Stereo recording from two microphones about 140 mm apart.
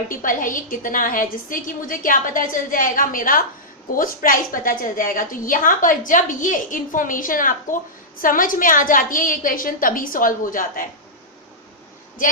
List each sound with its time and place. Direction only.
0.1 s a woman's voice: 70° left (ahead or behind)